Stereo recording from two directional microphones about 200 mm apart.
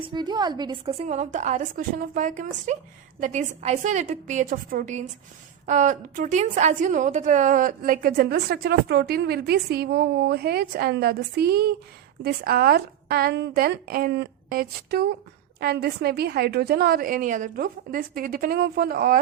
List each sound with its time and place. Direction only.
0.0 s a woman's voice: 20° right (ahead or behind); by 19.2 s 45° right (ahead or behind)